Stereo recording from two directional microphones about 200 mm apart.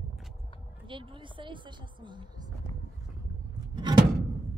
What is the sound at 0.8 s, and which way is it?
Speech, 25° right (ahead or behind).